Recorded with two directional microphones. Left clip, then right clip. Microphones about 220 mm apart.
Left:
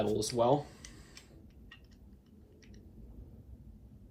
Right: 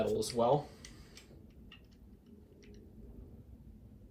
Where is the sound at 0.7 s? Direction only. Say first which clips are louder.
Left 1 dB; 20° left (ahead or behind).